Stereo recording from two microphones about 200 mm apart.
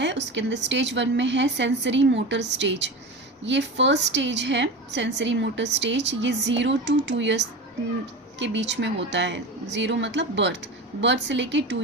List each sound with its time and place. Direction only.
0.0 s a woman's voice: 60° right (ahead or behind)